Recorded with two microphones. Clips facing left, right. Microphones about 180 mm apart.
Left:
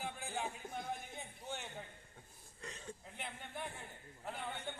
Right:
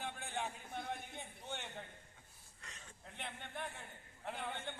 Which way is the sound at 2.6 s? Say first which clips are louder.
Left 10 dB; 30° left (ahead or behind).